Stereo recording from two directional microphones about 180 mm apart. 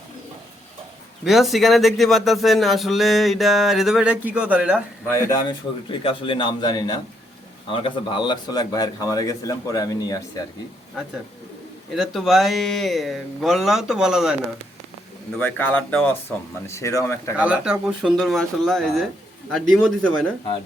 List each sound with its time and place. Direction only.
1.2 s a man's voice: centre (ahead or behind)
5.0 s speech: 15° left (ahead or behind)
11.9 s a man's voice: centre (ahead or behind)
15.4 s speech: 10° left (ahead or behind)
17.3 s a man's voice: 5° right (ahead or behind)